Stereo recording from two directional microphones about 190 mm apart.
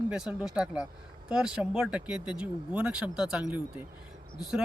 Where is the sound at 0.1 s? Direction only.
5° right (ahead or behind).